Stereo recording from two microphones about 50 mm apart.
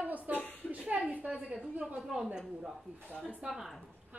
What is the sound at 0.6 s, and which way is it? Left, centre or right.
Speech, left.